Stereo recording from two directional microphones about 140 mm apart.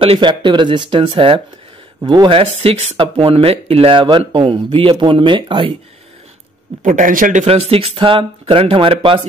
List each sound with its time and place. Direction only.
0.0 s speech: 40° right (ahead or behind)
6.8 s a man's voice: 75° right (ahead or behind)
7.4 s speech: 45° right (ahead or behind)